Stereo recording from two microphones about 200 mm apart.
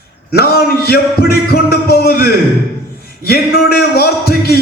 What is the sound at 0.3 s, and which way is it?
Speech, 50° left (ahead or behind).